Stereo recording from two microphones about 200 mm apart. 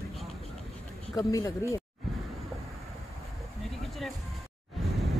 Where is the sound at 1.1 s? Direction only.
20° left (ahead or behind).